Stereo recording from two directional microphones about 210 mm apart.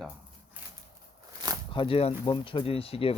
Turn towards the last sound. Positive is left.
turn(degrees=25)  # may be behind; listen again after turning